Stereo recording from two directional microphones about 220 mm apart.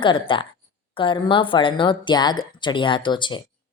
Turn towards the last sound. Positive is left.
turn(degrees=20)  # may be behind; listen again after turning